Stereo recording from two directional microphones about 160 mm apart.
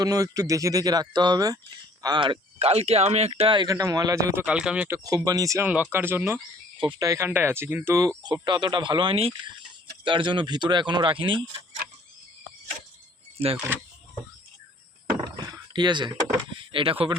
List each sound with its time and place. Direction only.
0.0 s speech: 20° right (ahead or behind)
4.4 s speech: 5° right (ahead or behind)
5.0 s speech: 25° right (ahead or behind)
6.7 s speech: 30° right (ahead or behind)
8.2 s speech: 30° right (ahead or behind)
13.4 s speech: 40° right (ahead or behind)
15.4 s a sound: 30° right (ahead or behind)
16.7 s speech: 35° right (ahead or behind)